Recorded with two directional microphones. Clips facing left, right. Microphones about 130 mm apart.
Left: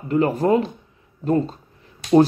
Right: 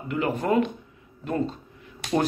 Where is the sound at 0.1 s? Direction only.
40° left (ahead or behind).